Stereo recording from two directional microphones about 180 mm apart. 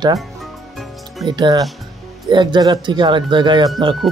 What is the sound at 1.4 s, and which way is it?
Speech, 20° right (ahead or behind).